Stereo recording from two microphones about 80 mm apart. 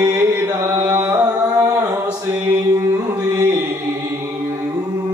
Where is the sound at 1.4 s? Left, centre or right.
Right.